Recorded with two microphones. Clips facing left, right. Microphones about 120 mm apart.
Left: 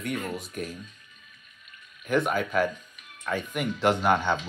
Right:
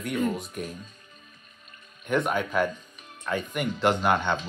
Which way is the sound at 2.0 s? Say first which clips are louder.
Even; centre (ahead or behind).